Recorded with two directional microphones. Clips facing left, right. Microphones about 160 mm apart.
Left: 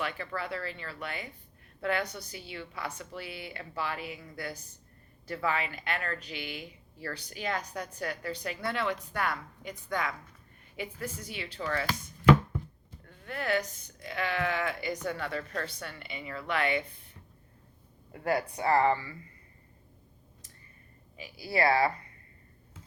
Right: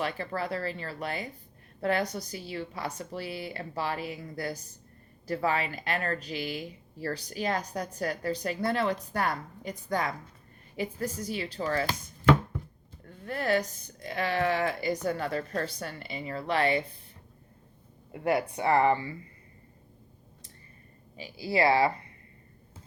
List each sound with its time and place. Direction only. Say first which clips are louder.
0.0 s a woman's voice: right 3 dB; 35° right (ahead or behind)
13.2 s a woman's voice: right 3 dB; 35° right (ahead or behind)
18.1 s speech: right 3 dB; 25° right (ahead or behind)
21.2 s speech: right 3 dB; 30° right (ahead or behind)